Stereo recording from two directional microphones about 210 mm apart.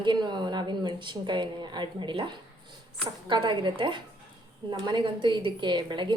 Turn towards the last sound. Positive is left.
turn(degrees=-20)  # may be behind; listen again after turning